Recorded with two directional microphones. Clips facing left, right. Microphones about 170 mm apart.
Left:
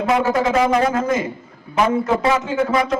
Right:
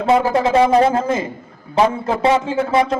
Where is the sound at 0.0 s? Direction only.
30° right (ahead or behind).